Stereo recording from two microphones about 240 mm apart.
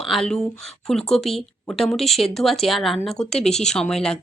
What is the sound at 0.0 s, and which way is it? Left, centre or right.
Speech, centre.